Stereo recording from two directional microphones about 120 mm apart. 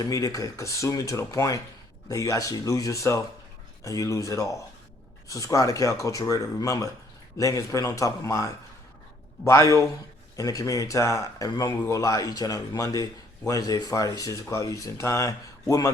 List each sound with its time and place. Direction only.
0.0 s speech: 30° left (ahead or behind)
9.5 s speech: 25° left (ahead or behind)